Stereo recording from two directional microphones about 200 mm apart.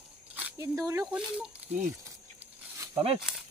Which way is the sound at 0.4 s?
15° right (ahead or behind).